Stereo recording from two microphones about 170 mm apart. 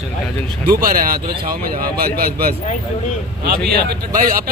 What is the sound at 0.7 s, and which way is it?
Speech, 55° right (ahead or behind).